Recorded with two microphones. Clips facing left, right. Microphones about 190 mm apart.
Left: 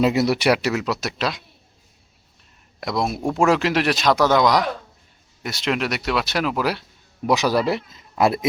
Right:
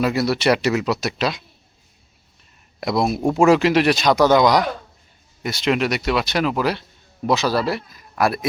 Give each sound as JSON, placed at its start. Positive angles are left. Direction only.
{"t": 0.0, "sound": "speech", "side_deg": 20}
{"t": 2.8, "sound": "speech", "side_deg": -5}
{"t": 7.3, "sound": "speech", "side_deg": 15}